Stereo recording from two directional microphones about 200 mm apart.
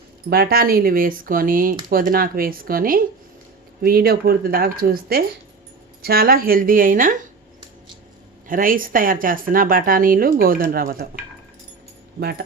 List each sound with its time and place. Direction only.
0.3 s a woman's voice: 50° right (ahead or behind)
8.4 s a woman's voice: 45° right (ahead or behind)
12.2 s a woman's voice: 50° right (ahead or behind)